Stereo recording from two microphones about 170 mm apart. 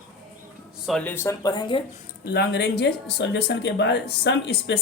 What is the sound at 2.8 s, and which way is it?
Speech, 85° left.